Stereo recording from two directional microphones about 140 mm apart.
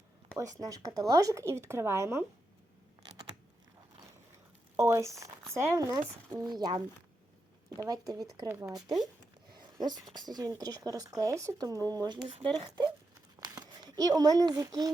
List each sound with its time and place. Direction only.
0.6 s speech: 25° right (ahead or behind)
4.8 s speech: 20° right (ahead or behind)
6.4 s speech: 30° right (ahead or behind)
9.8 s speech: 30° right (ahead or behind)
13.4 s a sound: 30° right (ahead or behind)